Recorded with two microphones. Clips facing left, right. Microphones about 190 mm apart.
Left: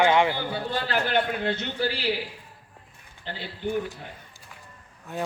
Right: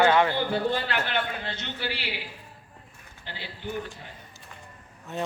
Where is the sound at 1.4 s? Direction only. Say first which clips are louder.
Left 7 dB; 55° left (ahead or behind).